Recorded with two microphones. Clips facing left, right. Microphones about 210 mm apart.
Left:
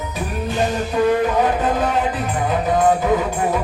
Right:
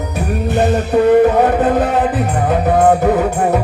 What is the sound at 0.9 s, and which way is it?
Music, 60° right (ahead or behind).